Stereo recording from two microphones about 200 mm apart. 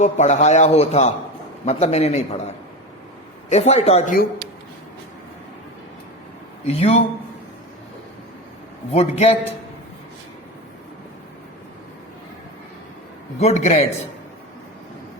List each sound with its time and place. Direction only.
0.0 s a man's voice: 35° left (ahead or behind)
6.7 s a man's voice: 30° left (ahead or behind)
8.9 s a man's voice: 30° left (ahead or behind)
13.4 s a man's voice: 35° left (ahead or behind)